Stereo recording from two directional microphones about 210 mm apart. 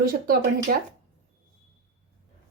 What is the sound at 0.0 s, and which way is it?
Speech, 45° right (ahead or behind).